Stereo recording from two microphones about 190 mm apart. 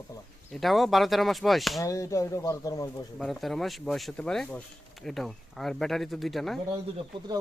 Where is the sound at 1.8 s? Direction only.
15° left (ahead or behind).